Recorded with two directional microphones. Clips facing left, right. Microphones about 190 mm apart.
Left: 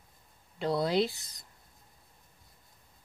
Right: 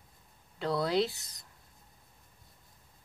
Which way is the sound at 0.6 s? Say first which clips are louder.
Left 1 dB; 20° left (ahead or behind).